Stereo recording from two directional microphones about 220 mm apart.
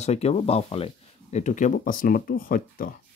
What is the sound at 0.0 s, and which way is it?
Speech, 30° left (ahead or behind).